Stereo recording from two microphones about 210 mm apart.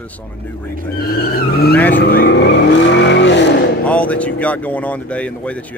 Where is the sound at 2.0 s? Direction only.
50° left (ahead or behind).